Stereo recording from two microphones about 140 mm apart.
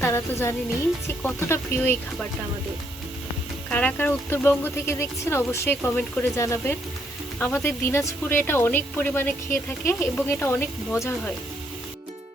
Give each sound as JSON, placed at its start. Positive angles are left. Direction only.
{"t": 0.0, "sound": "speech", "side_deg": 20}
{"t": 3.7, "sound": "speech", "side_deg": 10}